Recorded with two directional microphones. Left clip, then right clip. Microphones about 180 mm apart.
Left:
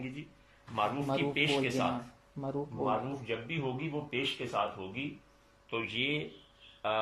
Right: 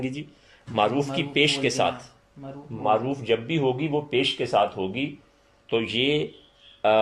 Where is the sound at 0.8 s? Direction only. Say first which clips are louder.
Right 8 dB; 45° right (ahead or behind).